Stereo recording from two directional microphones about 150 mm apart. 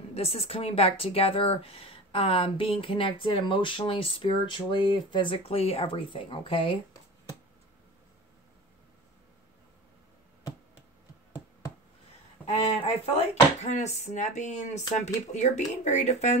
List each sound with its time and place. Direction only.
0.1 s speech: 45° left (ahead or behind)
12.4 s a sound: 10° left (ahead or behind)
12.8 s speech: 45° left (ahead or behind)